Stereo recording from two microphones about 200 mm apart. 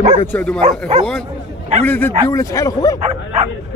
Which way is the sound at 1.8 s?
10° left (ahead or behind).